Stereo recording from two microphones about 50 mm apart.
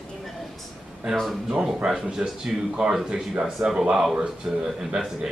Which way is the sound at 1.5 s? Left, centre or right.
Centre.